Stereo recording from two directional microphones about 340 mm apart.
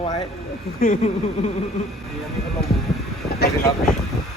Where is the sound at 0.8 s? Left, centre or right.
Left.